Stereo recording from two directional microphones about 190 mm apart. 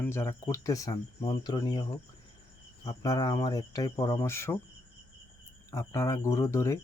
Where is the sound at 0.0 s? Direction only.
15° left (ahead or behind).